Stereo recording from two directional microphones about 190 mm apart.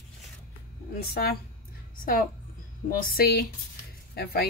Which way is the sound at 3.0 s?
50° left (ahead or behind).